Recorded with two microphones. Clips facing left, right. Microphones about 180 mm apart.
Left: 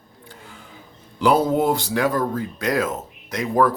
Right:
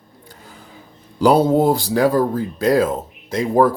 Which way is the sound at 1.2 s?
35° right (ahead or behind).